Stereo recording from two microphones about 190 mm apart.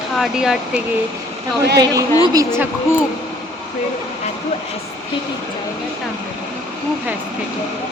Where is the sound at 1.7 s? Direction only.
20° right (ahead or behind).